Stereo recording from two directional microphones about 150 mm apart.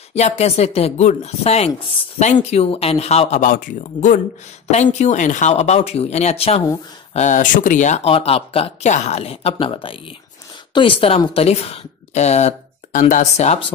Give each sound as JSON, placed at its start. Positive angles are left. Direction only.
{"t": 0.1, "sound": "speech", "side_deg": 45}
{"t": 7.2, "sound": "speech", "side_deg": 55}